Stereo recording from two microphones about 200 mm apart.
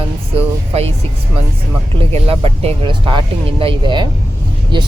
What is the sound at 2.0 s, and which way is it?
Speech, 30° right (ahead or behind).